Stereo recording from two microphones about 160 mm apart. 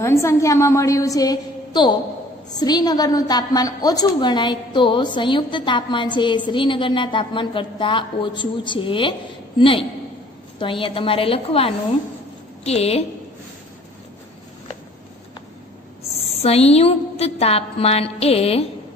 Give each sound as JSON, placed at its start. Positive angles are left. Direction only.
{"t": 0.0, "sound": "a woman's voice", "side_deg": 15}
{"t": 16.2, "sound": "a woman's voice", "side_deg": 40}